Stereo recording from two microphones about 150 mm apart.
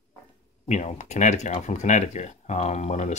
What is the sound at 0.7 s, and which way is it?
Speech, 50° left (ahead or behind).